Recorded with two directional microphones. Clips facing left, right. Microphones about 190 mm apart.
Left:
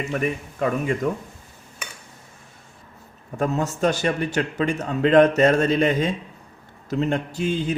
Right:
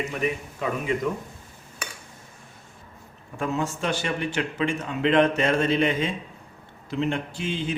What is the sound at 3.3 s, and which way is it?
A man's voice, 40° left (ahead or behind).